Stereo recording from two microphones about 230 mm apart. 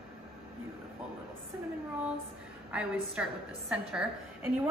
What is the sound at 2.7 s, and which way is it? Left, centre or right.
A woman's voice, centre.